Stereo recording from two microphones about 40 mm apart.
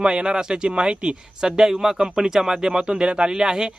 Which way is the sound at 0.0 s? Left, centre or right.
Right.